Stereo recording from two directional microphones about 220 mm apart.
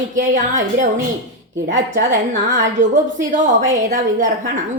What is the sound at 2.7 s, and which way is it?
A woman's voice, 35° right (ahead or behind).